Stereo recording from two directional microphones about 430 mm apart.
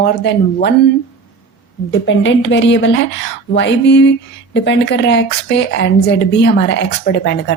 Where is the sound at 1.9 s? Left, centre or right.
Left.